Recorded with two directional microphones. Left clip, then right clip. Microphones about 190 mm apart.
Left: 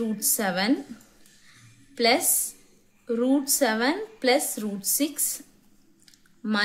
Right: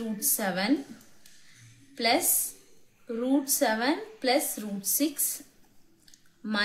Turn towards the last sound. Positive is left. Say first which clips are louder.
# left 4 dB
turn(degrees=35)  # may be behind; listen again after turning